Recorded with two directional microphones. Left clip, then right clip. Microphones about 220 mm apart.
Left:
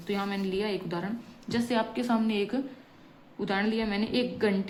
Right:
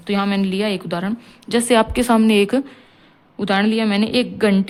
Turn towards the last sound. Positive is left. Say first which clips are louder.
# right 10 dB
turn(degrees=-50)  # may be behind; listen again after turning